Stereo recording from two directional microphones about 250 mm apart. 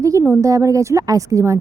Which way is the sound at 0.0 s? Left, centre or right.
Centre.